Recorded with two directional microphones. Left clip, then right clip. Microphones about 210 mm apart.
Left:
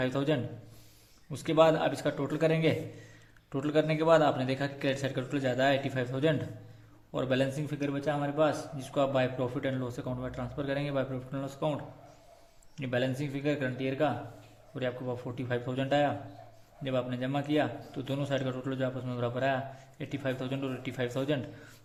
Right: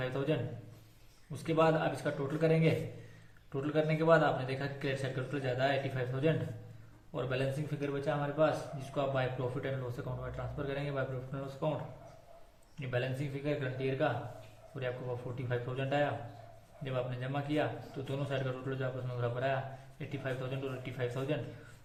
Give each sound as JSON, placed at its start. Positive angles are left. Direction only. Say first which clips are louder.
{"t": 0.0, "sound": "a man's voice", "louder": "left 4 dB", "side_deg": 50}
{"t": 12.8, "sound": "a man's voice", "louder": "left 5 dB", "side_deg": 45}